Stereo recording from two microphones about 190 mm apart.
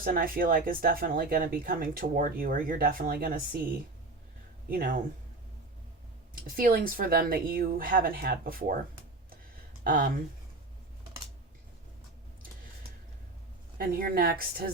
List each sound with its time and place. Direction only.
0.0 s speech: 50° right (ahead or behind)
4.7 s speech: 50° right (ahead or behind)
6.6 s speech: 50° right (ahead or behind)
9.8 s speech: 45° right (ahead or behind)
13.7 s speech: 50° right (ahead or behind)